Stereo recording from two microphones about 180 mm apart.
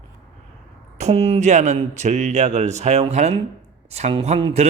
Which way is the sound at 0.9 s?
35° right (ahead or behind).